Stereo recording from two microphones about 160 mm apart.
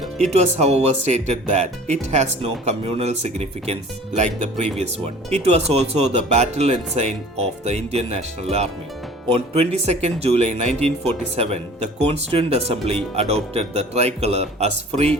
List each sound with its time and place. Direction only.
0.2 s speech: 45° right (ahead or behind)
12.0 s speech: 35° right (ahead or behind)